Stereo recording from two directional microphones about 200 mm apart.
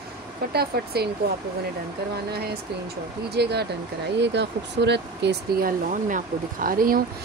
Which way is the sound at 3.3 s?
55° right (ahead or behind).